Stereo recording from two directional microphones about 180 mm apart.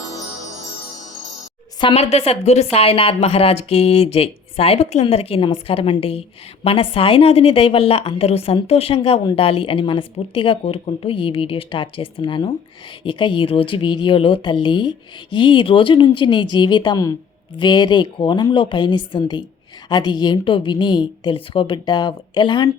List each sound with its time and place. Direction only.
1.8 s a woman's voice: 35° left (ahead or behind)